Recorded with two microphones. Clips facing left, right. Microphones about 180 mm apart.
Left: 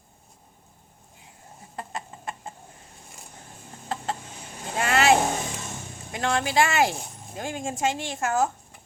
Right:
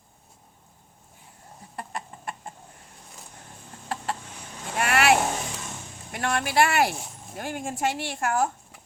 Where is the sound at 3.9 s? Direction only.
25° left (ahead or behind).